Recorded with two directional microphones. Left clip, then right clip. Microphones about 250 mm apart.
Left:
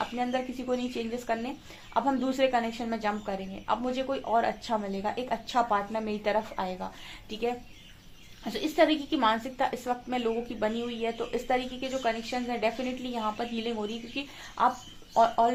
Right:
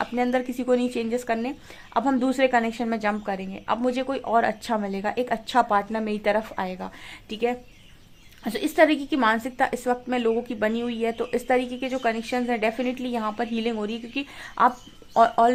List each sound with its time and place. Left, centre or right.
0.0 s a woman's voice: right